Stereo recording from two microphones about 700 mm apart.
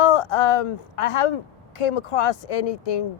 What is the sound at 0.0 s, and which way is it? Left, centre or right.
Speech, left.